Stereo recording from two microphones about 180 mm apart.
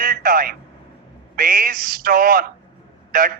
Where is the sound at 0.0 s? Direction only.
50° right (ahead or behind).